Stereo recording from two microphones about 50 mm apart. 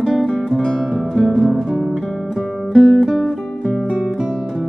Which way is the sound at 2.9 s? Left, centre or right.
Centre.